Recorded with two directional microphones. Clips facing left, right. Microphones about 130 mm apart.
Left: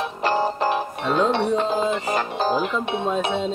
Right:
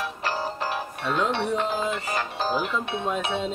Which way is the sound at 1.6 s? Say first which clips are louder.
Left 5 dB; 25° left (ahead or behind).